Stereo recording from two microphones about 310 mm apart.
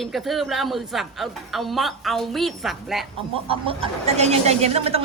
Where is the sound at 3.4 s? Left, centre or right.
Centre.